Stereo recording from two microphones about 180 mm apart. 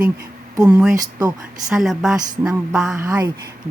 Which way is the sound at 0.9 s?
20° right (ahead or behind).